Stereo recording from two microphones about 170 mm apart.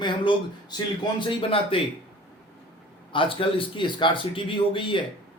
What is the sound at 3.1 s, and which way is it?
Speech, 30° left (ahead or behind).